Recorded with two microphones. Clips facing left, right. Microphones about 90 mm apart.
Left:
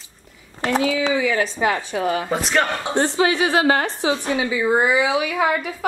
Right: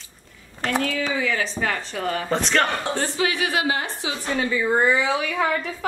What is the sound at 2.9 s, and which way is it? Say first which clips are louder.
Speech: left 5 dB; 25° left (ahead or behind).